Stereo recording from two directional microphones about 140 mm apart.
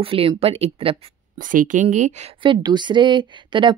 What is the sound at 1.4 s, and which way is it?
Speech, 70° right (ahead or behind).